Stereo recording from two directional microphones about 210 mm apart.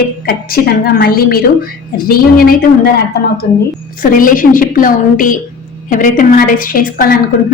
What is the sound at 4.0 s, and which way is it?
A woman's voice, 40° left (ahead or behind).